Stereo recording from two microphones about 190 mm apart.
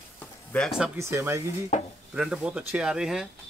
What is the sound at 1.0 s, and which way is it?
Speech, 15° right (ahead or behind).